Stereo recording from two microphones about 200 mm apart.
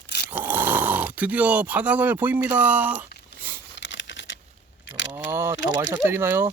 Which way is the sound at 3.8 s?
65° left (ahead or behind).